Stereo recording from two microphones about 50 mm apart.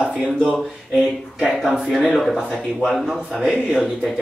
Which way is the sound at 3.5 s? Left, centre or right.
Centre.